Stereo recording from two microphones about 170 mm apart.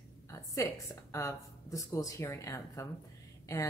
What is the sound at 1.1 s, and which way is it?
Speech, 20° left (ahead or behind).